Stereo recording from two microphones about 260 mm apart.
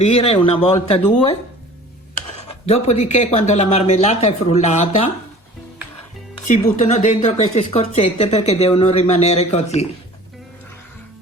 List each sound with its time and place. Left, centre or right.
0.0 s a woman's voice: left
2.6 s a woman's voice: left
6.4 s a woman's voice: left